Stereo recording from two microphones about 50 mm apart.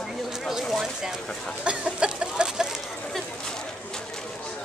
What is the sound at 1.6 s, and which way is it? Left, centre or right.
Chicken, right.